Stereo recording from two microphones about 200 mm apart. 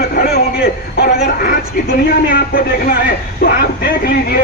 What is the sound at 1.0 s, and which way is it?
A woman's voice, 50° left (ahead or behind).